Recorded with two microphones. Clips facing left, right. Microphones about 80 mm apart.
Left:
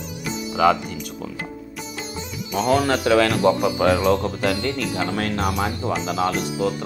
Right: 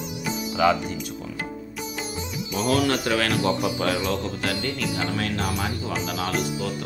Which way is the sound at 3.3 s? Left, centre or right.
Left.